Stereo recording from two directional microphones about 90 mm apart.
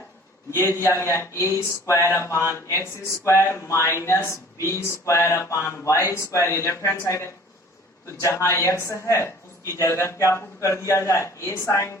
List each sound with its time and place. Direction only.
0.9 s speech: 35° left (ahead or behind)